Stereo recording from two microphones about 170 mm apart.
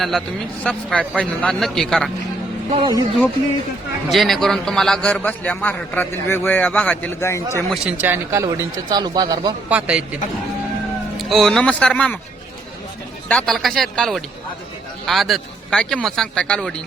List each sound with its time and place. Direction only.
0.0 s a man's voice: centre (ahead or behind)
2.7 s speech: 30° right (ahead or behind)
4.1 s a man's voice: centre (ahead or behind)
7.7 s speech: 10° right (ahead or behind); by 9.6 s 25° right (ahead or behind)
9.6 s speech: 5° right (ahead or behind)
11.2 s a man's voice: centre (ahead or behind)
13.2 s a man's voice: 5° left (ahead or behind)